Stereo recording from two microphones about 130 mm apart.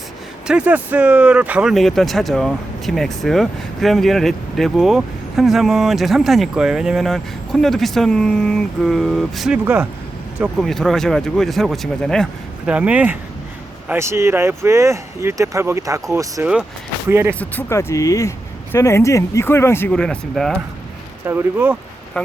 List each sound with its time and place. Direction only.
0.4 s speech: 10° right (ahead or behind)
10.6 s speech: centre (ahead or behind)
12.6 s speech: 10° right (ahead or behind)
17.4 s speech: 15° left (ahead or behind)
19.9 s speech: 5° left (ahead or behind)
21.2 s speech: 15° right (ahead or behind)